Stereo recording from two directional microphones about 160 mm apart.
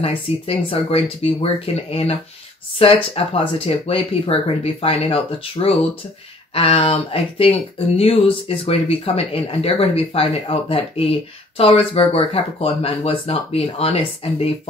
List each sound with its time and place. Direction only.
0.0 s speech: 35° left (ahead or behind)